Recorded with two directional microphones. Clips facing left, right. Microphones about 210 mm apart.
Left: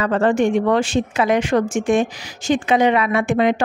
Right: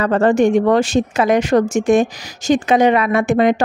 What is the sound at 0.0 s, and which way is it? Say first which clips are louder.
A woman's voice: right 3 dB; 40° right (ahead or behind).